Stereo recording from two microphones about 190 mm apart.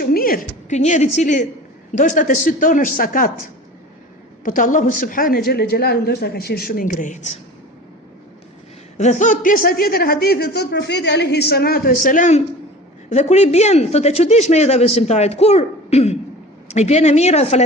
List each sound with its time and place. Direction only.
0.0 s a sound: 50° left (ahead or behind)
0.8 s a man's voice: 35° left (ahead or behind)
4.4 s a man's voice: 45° left (ahead or behind)
9.0 s a man's voice: 40° left (ahead or behind)